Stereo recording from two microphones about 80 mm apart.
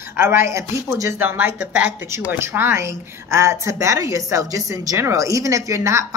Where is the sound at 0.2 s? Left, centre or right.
Right.